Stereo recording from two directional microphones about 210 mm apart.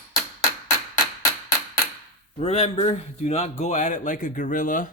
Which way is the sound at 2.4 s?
30° left (ahead or behind).